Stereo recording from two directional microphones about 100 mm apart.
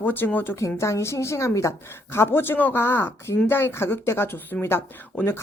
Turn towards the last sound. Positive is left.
turn(degrees=25)  # may be behind; listen again after turning